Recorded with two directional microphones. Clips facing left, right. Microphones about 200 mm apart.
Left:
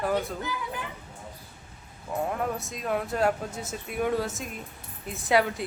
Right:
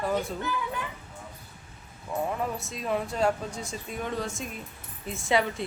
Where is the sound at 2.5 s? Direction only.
Centre (ahead or behind).